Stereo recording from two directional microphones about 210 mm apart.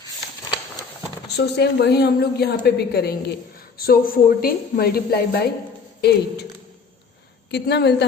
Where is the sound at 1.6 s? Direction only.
50° left (ahead or behind).